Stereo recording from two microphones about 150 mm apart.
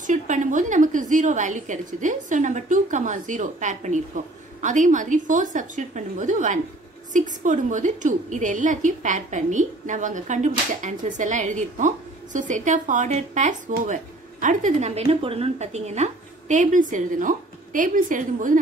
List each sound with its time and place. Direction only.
0.0 s a woman's voice: 60° right (ahead or behind)